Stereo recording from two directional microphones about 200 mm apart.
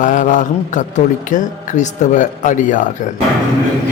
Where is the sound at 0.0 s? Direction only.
40° left (ahead or behind).